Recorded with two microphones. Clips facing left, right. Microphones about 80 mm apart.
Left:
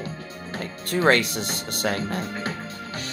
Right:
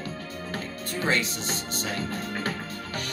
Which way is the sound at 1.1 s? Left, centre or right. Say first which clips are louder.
Left 6 dB; left.